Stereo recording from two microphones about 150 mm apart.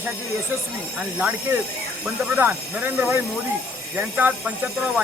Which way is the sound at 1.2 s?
10° right (ahead or behind).